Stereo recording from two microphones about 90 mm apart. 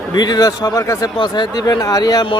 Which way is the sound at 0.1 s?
50° left (ahead or behind).